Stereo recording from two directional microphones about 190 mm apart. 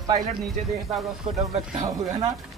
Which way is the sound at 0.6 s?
40° right (ahead or behind).